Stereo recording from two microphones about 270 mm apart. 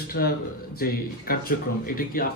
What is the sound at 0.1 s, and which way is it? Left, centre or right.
Speech, left.